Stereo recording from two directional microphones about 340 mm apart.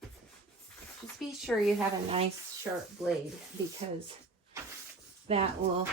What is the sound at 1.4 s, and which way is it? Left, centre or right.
Speech, centre.